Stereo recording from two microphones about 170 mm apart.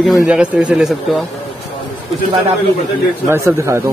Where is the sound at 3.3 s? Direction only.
15° right (ahead or behind).